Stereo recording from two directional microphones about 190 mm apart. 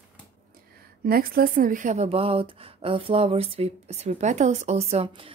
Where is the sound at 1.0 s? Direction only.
50° right (ahead or behind).